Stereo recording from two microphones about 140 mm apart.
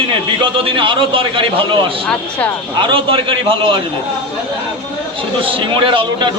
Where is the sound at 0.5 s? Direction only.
40° right (ahead or behind).